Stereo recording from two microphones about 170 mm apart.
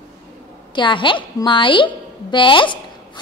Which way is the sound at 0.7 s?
30° left (ahead or behind).